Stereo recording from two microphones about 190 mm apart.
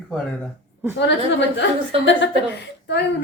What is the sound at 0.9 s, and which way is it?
Speech, 65° left (ahead or behind).